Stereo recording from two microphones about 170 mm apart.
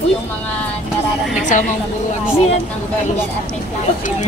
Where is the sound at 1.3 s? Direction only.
50° left (ahead or behind).